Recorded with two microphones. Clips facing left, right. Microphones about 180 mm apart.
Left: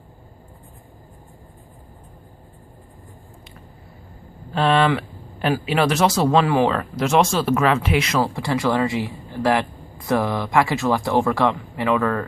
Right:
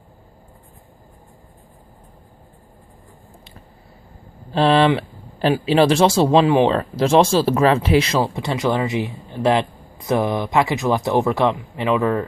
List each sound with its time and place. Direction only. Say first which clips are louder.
4.5 s speech: right 3 dB; 30° right (ahead or behind)